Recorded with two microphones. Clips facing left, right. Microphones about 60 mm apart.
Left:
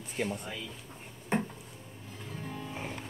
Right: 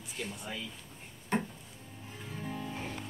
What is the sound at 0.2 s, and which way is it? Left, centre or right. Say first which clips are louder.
Speech: left 7 dB; left.